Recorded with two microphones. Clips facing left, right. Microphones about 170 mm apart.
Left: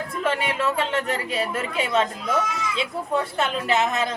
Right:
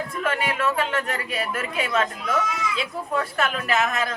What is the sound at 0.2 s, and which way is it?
A woman's voice, 25° left (ahead or behind).